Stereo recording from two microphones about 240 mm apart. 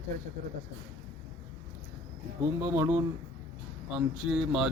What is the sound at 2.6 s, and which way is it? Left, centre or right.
Speech, centre.